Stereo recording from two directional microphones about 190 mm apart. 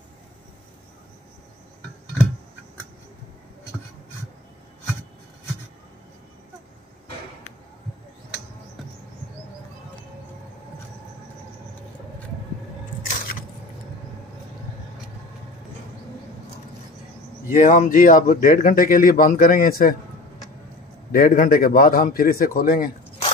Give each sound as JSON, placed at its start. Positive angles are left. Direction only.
{"t": 17.5, "sound": "a man's voice", "side_deg": 45}
{"t": 21.1, "sound": "a man's voice", "side_deg": 50}